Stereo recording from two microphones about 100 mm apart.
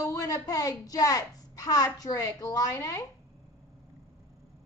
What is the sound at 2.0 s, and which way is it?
A woman's voice, 35° left (ahead or behind).